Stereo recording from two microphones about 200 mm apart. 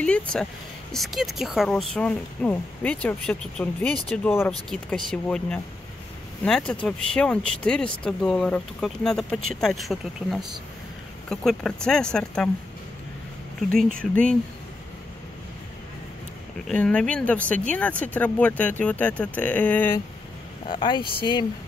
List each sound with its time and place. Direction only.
0.0 s a woman's voice: 5° left (ahead or behind)
13.6 s a woman's voice: centre (ahead or behind)
16.6 s speech: 5° left (ahead or behind)
20.6 s speech: 25° left (ahead or behind)